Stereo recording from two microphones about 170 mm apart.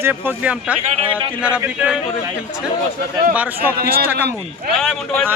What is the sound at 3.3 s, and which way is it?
Speech, 10° right (ahead or behind).